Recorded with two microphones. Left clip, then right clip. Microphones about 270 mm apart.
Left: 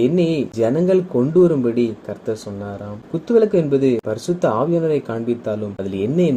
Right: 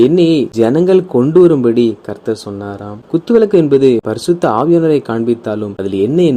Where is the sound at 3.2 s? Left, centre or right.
Right.